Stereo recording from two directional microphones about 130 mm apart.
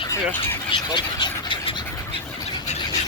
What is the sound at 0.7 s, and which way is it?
Speech, 35° left (ahead or behind).